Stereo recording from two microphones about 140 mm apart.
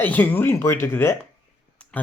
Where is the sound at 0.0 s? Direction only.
15° left (ahead or behind).